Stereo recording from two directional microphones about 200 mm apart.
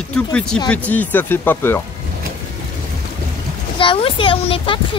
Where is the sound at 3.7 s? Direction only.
25° left (ahead or behind).